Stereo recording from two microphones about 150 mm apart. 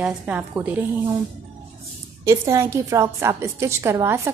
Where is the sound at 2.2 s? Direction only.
20° right (ahead or behind).